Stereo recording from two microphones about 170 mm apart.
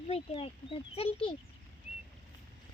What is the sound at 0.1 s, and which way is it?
Speech, 35° left (ahead or behind).